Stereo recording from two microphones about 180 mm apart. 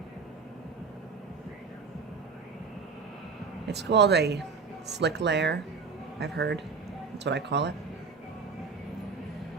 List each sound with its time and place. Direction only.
3.7 s speech: 70° right (ahead or behind)